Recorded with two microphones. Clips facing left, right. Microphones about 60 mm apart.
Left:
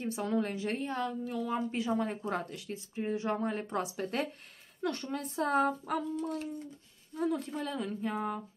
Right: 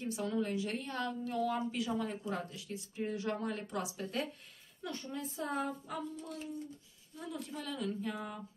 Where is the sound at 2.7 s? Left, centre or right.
Left.